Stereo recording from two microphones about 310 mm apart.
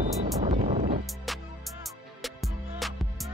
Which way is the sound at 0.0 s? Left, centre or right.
Right.